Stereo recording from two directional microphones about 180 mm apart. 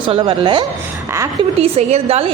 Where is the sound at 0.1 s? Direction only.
30° right (ahead or behind).